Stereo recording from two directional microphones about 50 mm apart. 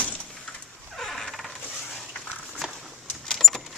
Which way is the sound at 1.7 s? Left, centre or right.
Centre.